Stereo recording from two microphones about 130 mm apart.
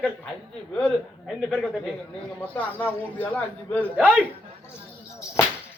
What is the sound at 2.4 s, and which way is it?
A man's voice, 10° left (ahead or behind).